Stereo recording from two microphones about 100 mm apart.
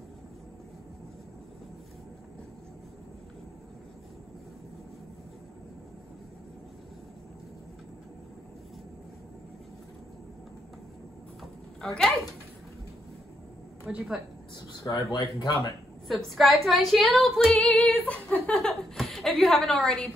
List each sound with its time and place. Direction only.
11.8 s a woman's voice: 5° left (ahead or behind)
13.8 s a woman's voice: 5° right (ahead or behind)
15.0 s speech: 50° left (ahead or behind)
15.4 s speech: 35° left (ahead or behind)
16.1 s a woman's voice: centre (ahead or behind)